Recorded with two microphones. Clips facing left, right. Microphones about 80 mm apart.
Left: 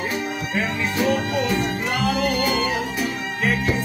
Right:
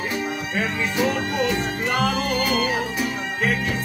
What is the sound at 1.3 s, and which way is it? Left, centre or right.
Music, right.